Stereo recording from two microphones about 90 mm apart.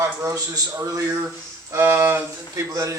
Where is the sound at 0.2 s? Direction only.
40° right (ahead or behind).